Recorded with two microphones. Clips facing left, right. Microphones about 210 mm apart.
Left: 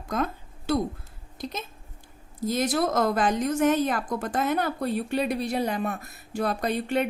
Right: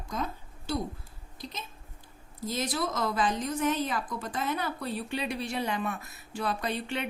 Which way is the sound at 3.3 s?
75° left (ahead or behind).